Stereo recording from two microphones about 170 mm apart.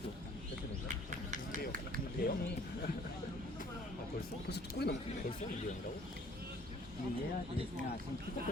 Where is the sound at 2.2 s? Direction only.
60° left (ahead or behind).